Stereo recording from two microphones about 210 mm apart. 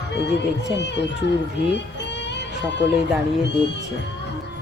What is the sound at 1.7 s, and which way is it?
Music, 55° left (ahead or behind).